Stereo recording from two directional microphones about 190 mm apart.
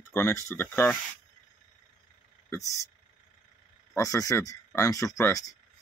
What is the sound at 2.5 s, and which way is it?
Speech, 15° left (ahead or behind).